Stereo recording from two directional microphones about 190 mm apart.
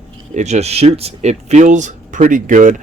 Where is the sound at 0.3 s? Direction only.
35° right (ahead or behind).